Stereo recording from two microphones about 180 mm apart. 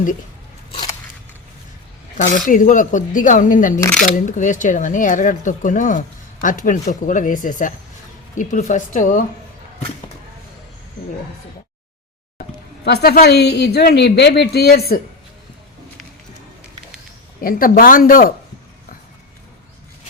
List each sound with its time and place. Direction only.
0.7 s biting: 25° left (ahead or behind)
2.1 s speech: 45° left (ahead or behind)
12.8 s speech: 60° left (ahead or behind)
17.4 s speech: 50° left (ahead or behind)